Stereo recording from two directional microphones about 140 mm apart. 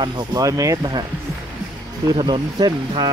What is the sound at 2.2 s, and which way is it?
Speech, 30° right (ahead or behind).